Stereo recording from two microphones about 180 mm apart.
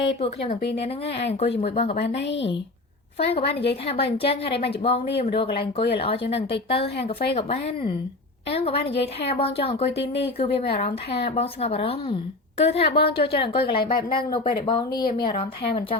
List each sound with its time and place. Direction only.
0.2 s speech: 35° left (ahead or behind)
2.2 s speech: 85° left
3.2 s speech: 35° left (ahead or behind)
3.5 s a woman's voice: 65° left (ahead or behind)
3.8 s speech: 30° left (ahead or behind)